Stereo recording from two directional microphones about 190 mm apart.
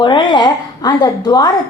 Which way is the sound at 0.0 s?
25° left (ahead or behind).